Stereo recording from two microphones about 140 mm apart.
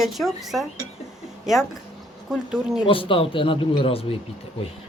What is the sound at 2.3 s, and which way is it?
Speech, 5° right (ahead or behind).